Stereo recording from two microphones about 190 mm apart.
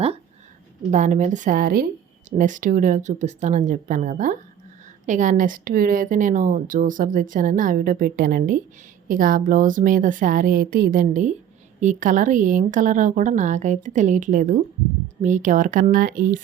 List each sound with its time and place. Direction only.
0.9 s a woman's voice: 40° right (ahead or behind)